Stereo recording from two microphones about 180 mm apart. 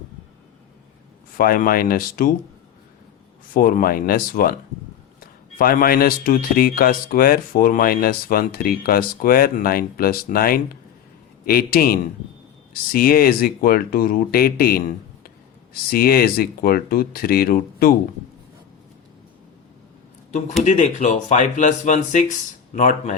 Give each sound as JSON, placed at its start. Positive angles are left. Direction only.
{"t": 1.4, "sound": "a man's voice", "side_deg": 55}
{"t": 3.5, "sound": "a man's voice", "side_deg": 50}
{"t": 15.9, "sound": "speech", "side_deg": 55}
{"t": 20.7, "sound": "a man's voice", "side_deg": 40}